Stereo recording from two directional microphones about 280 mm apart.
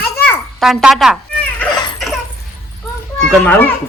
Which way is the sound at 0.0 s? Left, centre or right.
Centre.